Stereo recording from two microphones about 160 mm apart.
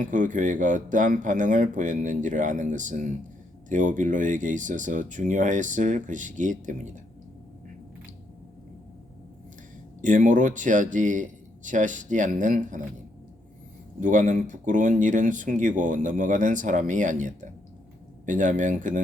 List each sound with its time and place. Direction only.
0.0 s speech: 55° right (ahead or behind)
10.0 s speech: 50° right (ahead or behind)
14.0 s speech: 55° right (ahead or behind)